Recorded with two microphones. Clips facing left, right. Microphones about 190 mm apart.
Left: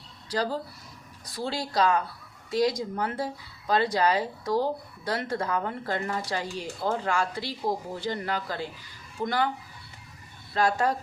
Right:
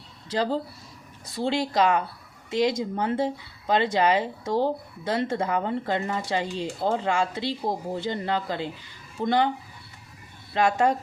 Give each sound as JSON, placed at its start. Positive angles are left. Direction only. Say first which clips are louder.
{"t": 0.3, "sound": "speech", "louder": "right 3 dB", "side_deg": -20}
{"t": 10.5, "sound": "speech", "louder": "right 3 dB", "side_deg": -20}